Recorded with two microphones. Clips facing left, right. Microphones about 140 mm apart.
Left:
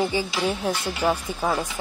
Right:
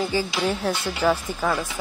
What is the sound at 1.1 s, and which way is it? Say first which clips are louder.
Speech: right 1 dB; 25° left (ahead or behind).